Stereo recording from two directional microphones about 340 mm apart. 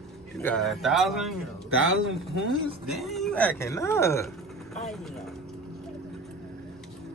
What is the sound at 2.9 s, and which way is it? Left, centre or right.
Speech, centre.